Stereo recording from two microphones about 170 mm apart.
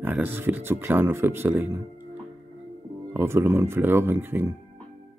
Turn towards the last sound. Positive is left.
turn(degrees=-10)  # may be behind; listen again after turning